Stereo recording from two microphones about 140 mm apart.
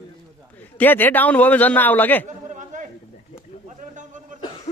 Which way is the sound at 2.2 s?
60° right (ahead or behind).